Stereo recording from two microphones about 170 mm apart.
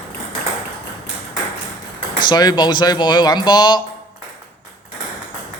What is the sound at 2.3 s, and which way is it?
Speech, 25° left (ahead or behind).